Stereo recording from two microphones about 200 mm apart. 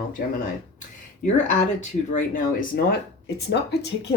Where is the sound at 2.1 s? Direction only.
40° left (ahead or behind).